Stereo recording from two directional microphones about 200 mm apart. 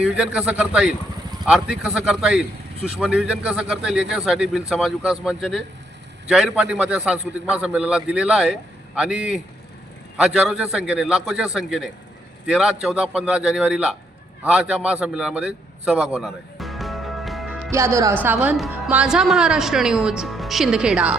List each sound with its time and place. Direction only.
0.0 s a woman's voice: 5° right (ahead or behind)
14.4 s a sound: 5° right (ahead or behind)
17.7 s a woman's voice: 15° right (ahead or behind)